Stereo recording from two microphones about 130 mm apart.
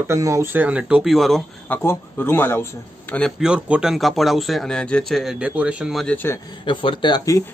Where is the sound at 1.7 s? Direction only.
15° left (ahead or behind).